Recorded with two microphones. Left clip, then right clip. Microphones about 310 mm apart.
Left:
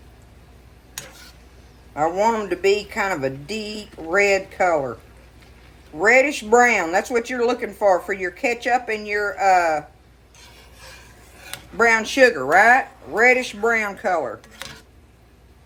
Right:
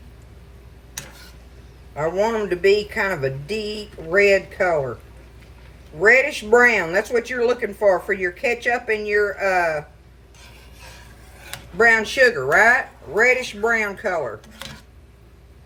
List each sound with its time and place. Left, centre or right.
2.0 s speech: centre
6.0 s speech: centre
11.8 s speech: centre